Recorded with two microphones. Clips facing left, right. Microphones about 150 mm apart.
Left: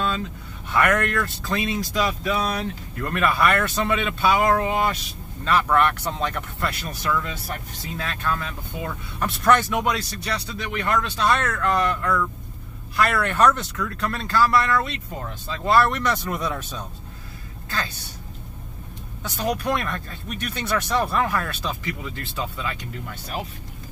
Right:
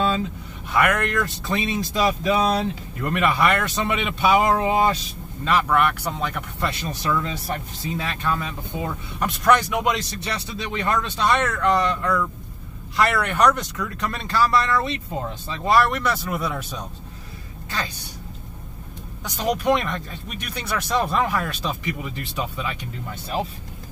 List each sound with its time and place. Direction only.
0.7 s speech: 10° right (ahead or behind)
5.4 s speech: 10° right (ahead or behind)
6.6 s a woman's voice: 25° right (ahead or behind)
19.6 s speech: 15° right (ahead or behind)